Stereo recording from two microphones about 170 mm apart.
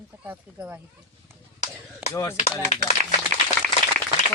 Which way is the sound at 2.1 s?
15° left (ahead or behind).